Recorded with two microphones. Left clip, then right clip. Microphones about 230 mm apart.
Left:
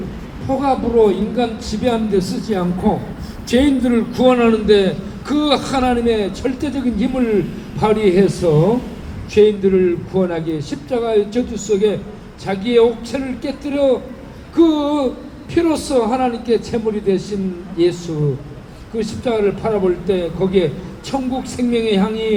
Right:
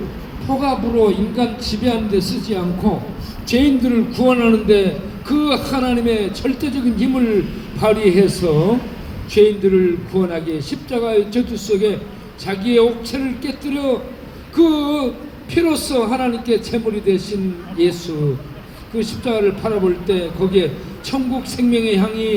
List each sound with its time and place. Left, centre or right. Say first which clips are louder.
0.6 s a man's voice: left 2 dB; right
18.9 s a man's voice: left 1 dB; right